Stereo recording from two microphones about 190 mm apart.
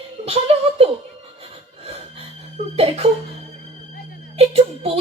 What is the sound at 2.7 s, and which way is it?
Music, 30° right (ahead or behind).